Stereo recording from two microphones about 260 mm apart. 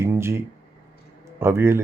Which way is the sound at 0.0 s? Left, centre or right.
Centre.